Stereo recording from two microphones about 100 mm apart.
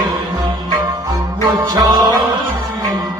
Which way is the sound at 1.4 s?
40° right (ahead or behind).